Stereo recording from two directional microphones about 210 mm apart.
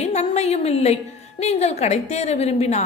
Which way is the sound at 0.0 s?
30° left (ahead or behind).